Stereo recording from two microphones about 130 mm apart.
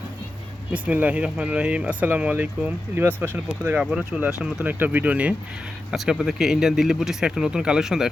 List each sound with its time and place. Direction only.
0.7 s speech: 10° right (ahead or behind)